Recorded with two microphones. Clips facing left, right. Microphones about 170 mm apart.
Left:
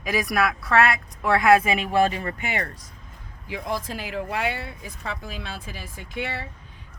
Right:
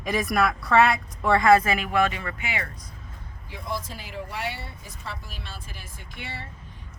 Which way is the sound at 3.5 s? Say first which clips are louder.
Left 4 dB; 90° left.